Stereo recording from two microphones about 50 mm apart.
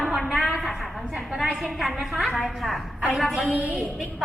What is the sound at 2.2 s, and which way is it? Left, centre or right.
Speech, centre.